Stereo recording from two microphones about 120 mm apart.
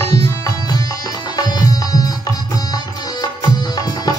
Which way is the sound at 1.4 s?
35° left (ahead or behind).